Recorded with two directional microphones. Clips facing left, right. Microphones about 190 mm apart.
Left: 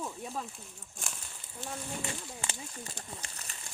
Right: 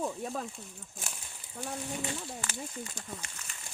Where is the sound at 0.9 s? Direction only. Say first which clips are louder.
Left 1 dB; 5° right (ahead or behind).